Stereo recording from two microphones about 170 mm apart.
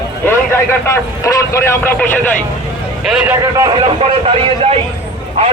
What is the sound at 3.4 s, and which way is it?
Speech, 25° right (ahead or behind).